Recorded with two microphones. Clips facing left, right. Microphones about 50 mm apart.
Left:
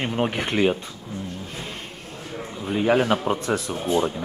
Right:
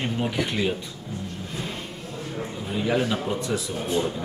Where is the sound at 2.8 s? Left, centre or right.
Left.